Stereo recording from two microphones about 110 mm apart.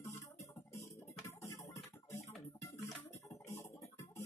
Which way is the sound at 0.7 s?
30° left (ahead or behind).